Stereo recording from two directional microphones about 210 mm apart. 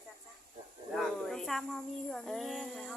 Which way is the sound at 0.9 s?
Centre (ahead or behind).